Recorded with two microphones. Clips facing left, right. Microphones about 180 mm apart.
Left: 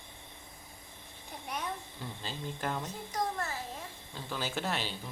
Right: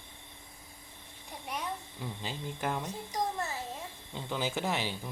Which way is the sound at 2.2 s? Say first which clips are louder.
Right 1 dB; 15° right (ahead or behind).